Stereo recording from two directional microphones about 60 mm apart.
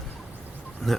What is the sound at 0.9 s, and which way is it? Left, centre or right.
Speech, centre.